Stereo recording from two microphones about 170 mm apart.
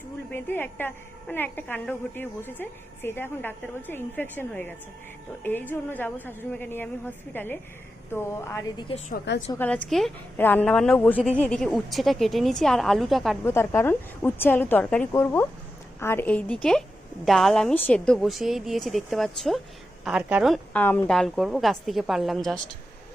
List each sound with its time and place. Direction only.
0.3 s a woman's voice: 10° left (ahead or behind); by 9.0 s 25° left (ahead or behind)
9.6 s a woman's voice: 10° left (ahead or behind)
13.4 s a woman's voice: 15° left (ahead or behind); by 20.6 s 5° right (ahead or behind)
20.7 s a woman's voice: 10° left (ahead or behind)